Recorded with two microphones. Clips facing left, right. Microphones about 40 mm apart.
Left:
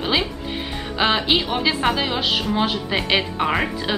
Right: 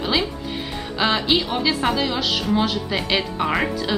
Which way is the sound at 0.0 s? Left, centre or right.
Centre.